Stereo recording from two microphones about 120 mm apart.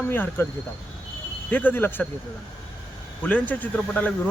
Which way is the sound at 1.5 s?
15° left (ahead or behind).